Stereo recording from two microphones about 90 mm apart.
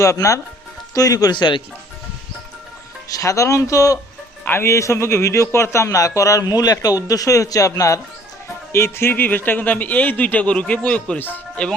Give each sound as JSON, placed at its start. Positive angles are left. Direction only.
{"t": 0.0, "sound": "a man's voice", "side_deg": 35}
{"t": 3.1, "sound": "a man's voice", "side_deg": 40}
{"t": 4.4, "sound": "a man's voice", "side_deg": 30}